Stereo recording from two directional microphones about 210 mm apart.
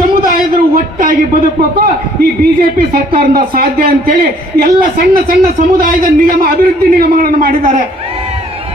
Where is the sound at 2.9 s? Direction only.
45° right (ahead or behind).